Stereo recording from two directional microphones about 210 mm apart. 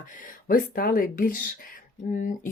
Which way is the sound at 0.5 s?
45° left (ahead or behind).